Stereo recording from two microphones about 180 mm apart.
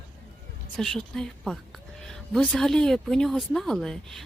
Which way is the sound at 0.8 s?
5° left (ahead or behind).